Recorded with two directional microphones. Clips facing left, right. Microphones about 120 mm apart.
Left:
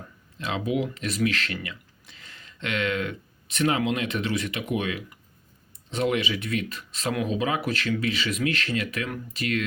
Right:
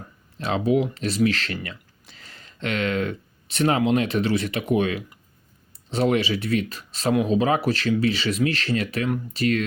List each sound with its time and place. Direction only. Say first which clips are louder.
0.3 s speech: right 6 dB; 35° right (ahead or behind)